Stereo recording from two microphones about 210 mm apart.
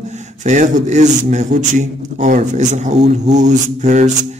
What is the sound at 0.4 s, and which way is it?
A man's voice, 35° right (ahead or behind).